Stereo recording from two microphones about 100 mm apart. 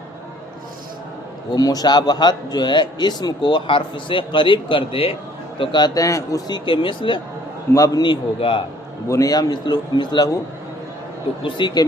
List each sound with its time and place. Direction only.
1.5 s a man's voice: 40° left (ahead or behind); by 5.1 s 65° left (ahead or behind)
5.5 s a man's voice: 45° left (ahead or behind)
6.7 s a man's voice: 55° left (ahead or behind)
7.7 s a man's voice: 35° left (ahead or behind)
8.0 s a man's voice: 60° left (ahead or behind)
9.0 s a man's voice: 35° left (ahead or behind); by 10.2 s 50° left (ahead or behind)
11.4 s a man's voice: 50° left (ahead or behind)